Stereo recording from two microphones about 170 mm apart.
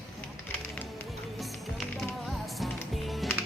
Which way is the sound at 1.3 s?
Centre (ahead or behind).